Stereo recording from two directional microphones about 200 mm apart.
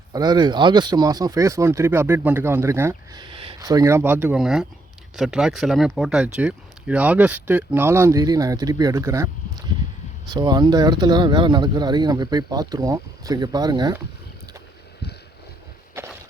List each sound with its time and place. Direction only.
0.1 s speech: 20° right (ahead or behind)